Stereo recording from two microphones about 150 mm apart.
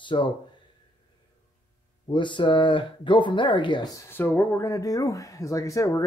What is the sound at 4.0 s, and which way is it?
Speech, 15° left (ahead or behind).